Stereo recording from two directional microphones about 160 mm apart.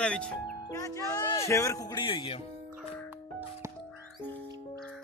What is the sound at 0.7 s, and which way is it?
Speech, 20° left (ahead or behind).